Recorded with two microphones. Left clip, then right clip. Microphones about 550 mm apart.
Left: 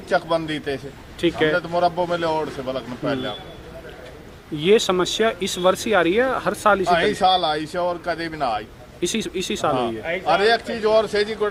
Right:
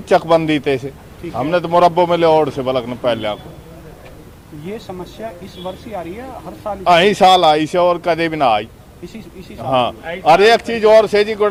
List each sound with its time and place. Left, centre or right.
0.1 s speech: right
4.6 s speech: left
6.8 s speech: right
9.6 s speech: left
10.2 s speech: right